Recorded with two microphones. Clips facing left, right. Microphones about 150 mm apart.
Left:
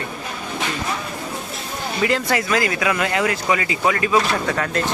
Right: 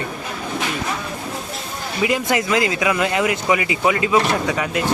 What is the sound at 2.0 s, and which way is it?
Speech, 15° right (ahead or behind).